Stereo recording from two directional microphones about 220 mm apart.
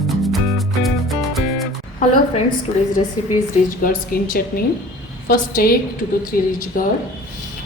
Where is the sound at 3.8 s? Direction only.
40° left (ahead or behind).